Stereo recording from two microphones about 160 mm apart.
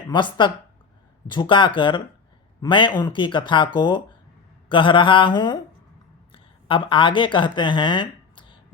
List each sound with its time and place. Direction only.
0.1 s speech: 30° left (ahead or behind)